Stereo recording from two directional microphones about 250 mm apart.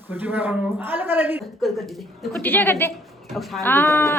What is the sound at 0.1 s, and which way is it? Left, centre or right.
A man's voice, centre.